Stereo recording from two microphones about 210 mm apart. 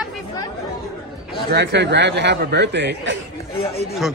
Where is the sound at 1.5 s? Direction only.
55° right (ahead or behind).